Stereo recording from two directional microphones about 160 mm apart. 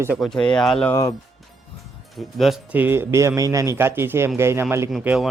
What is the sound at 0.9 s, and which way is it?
Speech, 20° left (ahead or behind).